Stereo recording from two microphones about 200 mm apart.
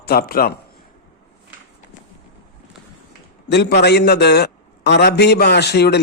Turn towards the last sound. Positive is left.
turn(degrees=55)  # may be behind; listen again after turning